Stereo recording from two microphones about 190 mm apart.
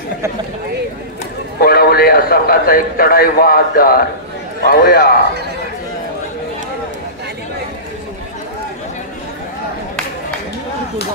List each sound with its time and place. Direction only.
1.6 s a man's voice: 50° left (ahead or behind)